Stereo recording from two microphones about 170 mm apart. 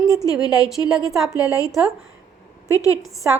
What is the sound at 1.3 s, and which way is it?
Speech, 20° left (ahead or behind).